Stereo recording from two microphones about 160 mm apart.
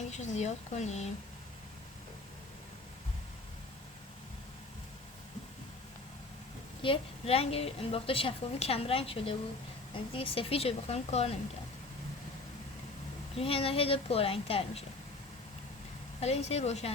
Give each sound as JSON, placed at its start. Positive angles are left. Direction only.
{"t": 0.1, "sound": "speech", "side_deg": 45}
{"t": 6.8, "sound": "a woman's voice", "side_deg": 35}
{"t": 13.3, "sound": "a woman's voice", "side_deg": 35}
{"t": 16.2, "sound": "speech", "side_deg": 40}